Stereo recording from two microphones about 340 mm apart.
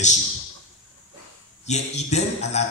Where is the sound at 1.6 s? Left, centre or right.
Centre.